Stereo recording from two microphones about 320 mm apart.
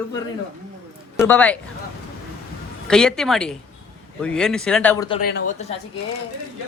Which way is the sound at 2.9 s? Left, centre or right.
Centre.